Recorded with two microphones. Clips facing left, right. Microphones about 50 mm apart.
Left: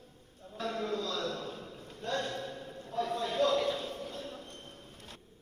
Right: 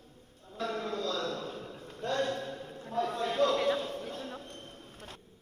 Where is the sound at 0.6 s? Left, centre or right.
Right.